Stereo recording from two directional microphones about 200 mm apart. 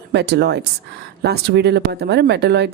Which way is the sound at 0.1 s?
55° right (ahead or behind).